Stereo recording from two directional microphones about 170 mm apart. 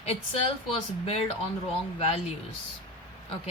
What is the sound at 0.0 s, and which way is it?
Speech, 40° left (ahead or behind).